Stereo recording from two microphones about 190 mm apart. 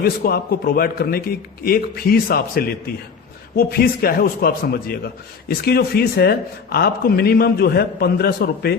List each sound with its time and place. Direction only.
0.0 s a man's voice: 50° left (ahead or behind)